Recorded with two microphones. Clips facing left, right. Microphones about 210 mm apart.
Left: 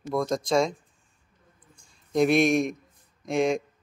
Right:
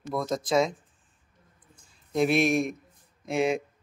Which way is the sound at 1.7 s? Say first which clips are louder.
Left 3 dB; 5° right (ahead or behind).